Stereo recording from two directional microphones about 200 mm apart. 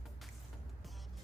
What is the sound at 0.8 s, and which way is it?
Music, centre (ahead or behind).